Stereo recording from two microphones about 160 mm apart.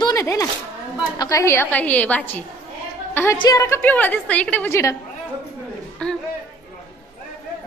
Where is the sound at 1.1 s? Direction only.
20° left (ahead or behind).